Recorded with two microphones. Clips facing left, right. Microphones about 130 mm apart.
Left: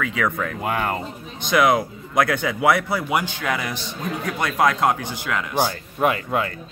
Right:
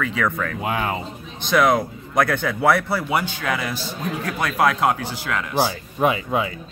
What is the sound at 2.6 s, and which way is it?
Speech, 15° left (ahead or behind).